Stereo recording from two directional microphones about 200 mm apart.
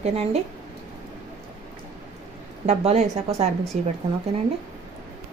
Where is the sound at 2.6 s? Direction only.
35° right (ahead or behind).